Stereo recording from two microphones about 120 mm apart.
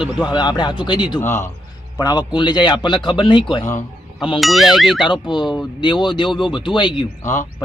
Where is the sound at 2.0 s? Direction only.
35° left (ahead or behind).